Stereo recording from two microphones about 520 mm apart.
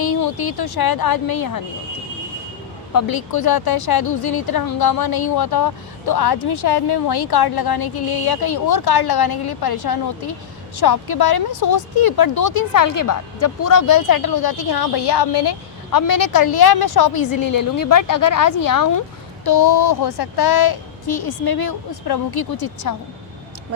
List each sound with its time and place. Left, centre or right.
0.0 s speech: left
2.9 s speech: left